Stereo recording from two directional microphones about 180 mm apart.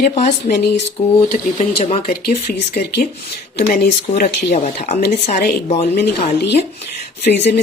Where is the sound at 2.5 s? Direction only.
50° left (ahead or behind).